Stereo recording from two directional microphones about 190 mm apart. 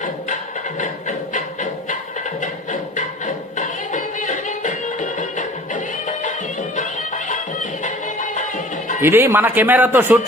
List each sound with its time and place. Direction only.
0.8 s a sound: 40° left (ahead or behind)
3.0 s music: 40° left (ahead or behind)
9.0 s a man's voice: 15° right (ahead or behind)